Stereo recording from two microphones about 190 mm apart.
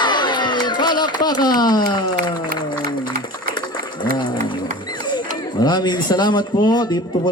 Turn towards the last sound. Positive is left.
turn(degrees=20)  # may be behind; listen again after turning